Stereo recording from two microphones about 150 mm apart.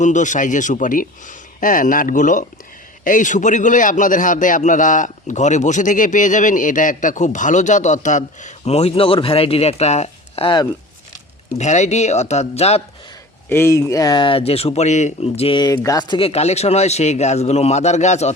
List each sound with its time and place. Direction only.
0.0 s a man's voice: 55° left (ahead or behind); by 10.7 s 35° left (ahead or behind)
11.5 s speech: 50° left (ahead or behind)
13.5 s speech: 15° left (ahead or behind); by 18.3 s 50° left (ahead or behind)